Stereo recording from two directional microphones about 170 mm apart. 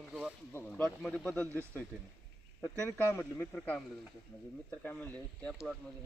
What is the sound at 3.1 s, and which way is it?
Speech, 15° left (ahead or behind).